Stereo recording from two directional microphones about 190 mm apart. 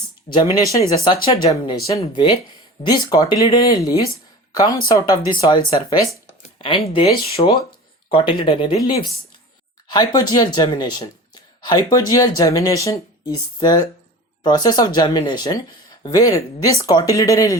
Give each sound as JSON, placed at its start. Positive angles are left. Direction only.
{"t": 0.3, "sound": "speech", "side_deg": 25}